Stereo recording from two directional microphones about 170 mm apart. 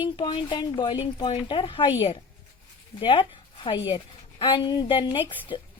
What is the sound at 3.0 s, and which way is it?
A woman's voice, 30° left (ahead or behind).